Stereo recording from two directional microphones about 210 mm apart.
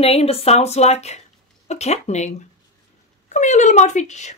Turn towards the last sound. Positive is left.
turn(degrees=35)  # may be behind; listen again after turning